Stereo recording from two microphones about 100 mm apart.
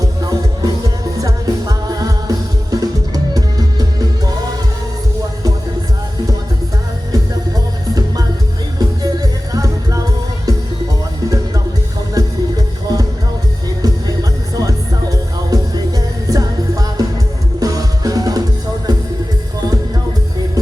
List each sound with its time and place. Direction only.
0.0 s music: 40° right (ahead or behind)
8.8 s music: 40° right (ahead or behind)
12.1 s music: 35° right (ahead or behind)